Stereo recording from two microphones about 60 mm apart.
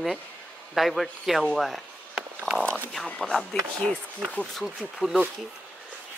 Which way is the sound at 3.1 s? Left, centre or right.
Centre.